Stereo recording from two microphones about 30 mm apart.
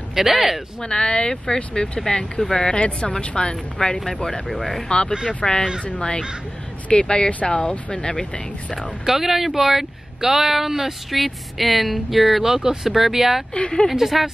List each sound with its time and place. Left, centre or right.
0.1 s speech: centre
0.8 s speech: left
9.0 s speech: centre
13.6 s speech: left
13.8 s speech: centre